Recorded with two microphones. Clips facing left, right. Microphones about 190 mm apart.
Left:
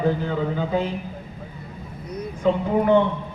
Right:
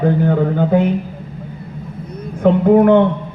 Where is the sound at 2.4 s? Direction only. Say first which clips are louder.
Right 10 dB; 60° right (ahead or behind).